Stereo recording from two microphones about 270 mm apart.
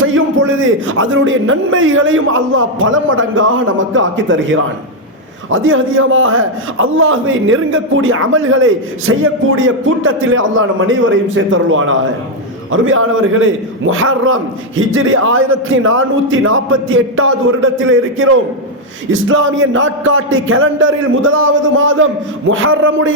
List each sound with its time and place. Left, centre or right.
0.0 s a man's voice: right